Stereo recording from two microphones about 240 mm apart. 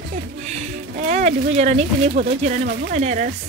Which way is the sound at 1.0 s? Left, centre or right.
Right.